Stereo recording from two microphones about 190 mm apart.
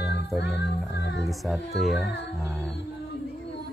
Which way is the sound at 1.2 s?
Centre (ahead or behind).